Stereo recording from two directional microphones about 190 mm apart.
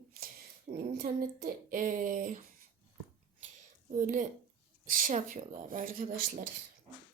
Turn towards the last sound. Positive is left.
turn(degrees=-45)  # may be behind; listen again after turning